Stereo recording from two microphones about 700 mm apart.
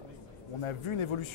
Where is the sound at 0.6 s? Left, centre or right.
Left.